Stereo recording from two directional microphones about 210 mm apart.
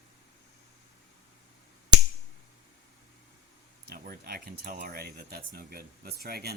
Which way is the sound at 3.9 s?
45° right (ahead or behind).